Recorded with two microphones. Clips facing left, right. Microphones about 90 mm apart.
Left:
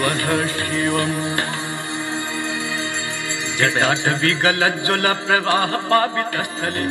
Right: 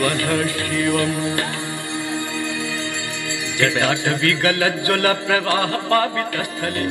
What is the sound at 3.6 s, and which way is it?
Mantra, 25° left (ahead or behind).